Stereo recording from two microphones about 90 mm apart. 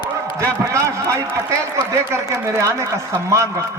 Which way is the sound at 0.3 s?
35° right (ahead or behind).